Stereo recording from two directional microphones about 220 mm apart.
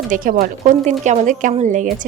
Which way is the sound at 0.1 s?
40° right (ahead or behind).